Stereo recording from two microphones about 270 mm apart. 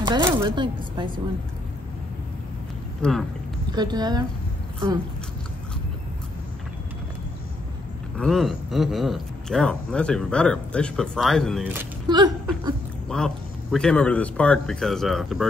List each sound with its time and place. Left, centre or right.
0.0 s speech: centre
3.0 s speech: centre
3.7 s speech: centre
8.2 s speech: centre
13.1 s speech: centre